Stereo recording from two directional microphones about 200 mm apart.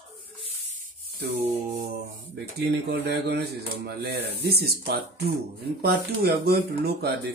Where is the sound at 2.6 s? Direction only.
55° right (ahead or behind).